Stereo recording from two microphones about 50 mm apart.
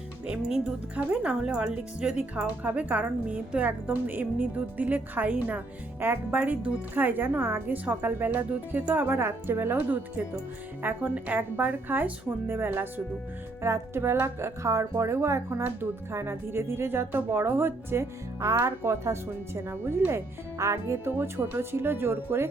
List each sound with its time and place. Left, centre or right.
0.3 s speech: centre
6.9 s speech: right
10.8 s speech: right
13.6 s speech: right
15.8 s speech: right
17.1 s speech: right
20.6 s speech: right
21.0 s speech: right